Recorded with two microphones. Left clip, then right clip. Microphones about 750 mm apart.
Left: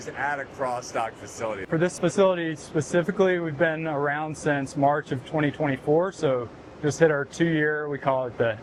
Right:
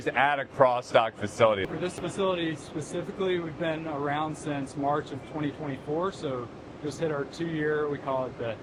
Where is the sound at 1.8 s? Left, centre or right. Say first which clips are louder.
Left 9 dB; left.